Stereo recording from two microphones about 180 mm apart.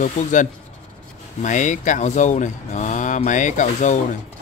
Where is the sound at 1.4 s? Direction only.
45° left (ahead or behind).